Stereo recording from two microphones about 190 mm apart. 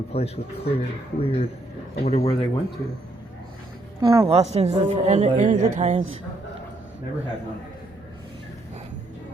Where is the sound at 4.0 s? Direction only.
20° right (ahead or behind).